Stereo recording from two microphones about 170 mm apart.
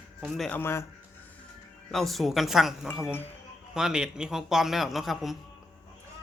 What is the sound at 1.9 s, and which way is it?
A man's voice, centre (ahead or behind).